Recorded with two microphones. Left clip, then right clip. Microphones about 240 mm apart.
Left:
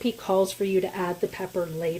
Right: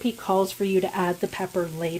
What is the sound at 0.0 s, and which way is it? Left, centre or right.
Speech, centre.